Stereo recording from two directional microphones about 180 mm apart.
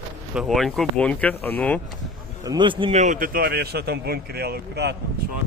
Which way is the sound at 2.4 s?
20° right (ahead or behind).